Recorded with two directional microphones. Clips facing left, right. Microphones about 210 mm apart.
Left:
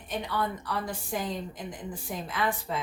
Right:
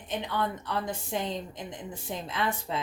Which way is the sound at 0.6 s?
25° right (ahead or behind).